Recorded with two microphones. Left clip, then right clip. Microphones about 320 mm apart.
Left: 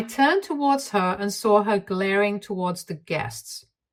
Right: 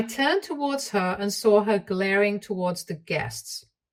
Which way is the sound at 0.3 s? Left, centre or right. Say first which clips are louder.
Left 3 dB; left.